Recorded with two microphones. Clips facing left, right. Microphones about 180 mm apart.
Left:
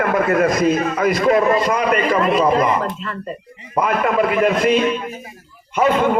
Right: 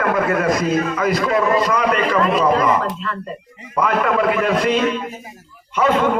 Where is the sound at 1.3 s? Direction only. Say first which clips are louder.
Left 4 dB; 25° left (ahead or behind).